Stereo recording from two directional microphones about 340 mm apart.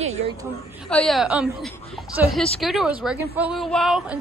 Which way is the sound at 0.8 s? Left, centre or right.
Centre.